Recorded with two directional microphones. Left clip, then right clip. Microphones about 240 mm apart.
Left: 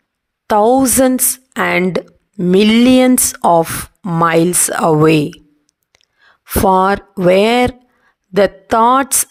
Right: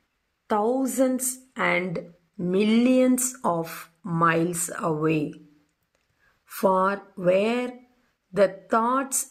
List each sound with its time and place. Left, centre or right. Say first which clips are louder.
0.4 s a woman's voice: left 13 dB; left
6.4 s a woman's voice: left 11 dB; left